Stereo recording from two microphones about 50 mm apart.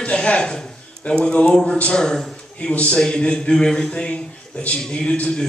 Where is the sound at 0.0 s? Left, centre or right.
Left.